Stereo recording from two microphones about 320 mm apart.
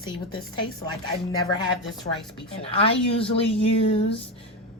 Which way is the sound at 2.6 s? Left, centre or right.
Centre.